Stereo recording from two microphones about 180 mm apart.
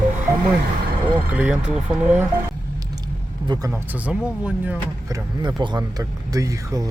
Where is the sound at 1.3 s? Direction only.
5° right (ahead or behind).